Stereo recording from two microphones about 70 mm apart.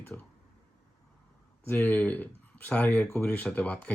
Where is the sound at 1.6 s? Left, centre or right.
Left.